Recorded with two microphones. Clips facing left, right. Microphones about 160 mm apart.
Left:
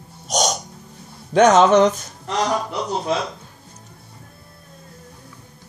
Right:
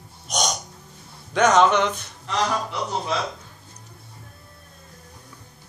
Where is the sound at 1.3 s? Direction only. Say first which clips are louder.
Left 5 dB; 40° left (ahead or behind).